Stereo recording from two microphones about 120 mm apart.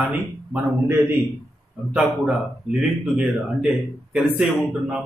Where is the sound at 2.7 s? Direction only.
10° right (ahead or behind).